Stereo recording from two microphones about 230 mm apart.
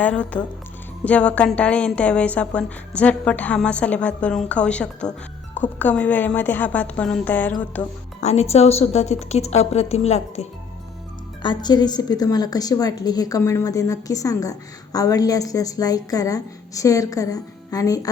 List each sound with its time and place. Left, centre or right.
0.0 s a woman's voice: centre
8.2 s a woman's voice: left
11.4 s a woman's voice: centre